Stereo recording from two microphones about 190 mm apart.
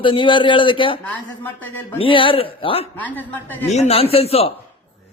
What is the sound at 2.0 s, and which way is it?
Speech, 25° left (ahead or behind).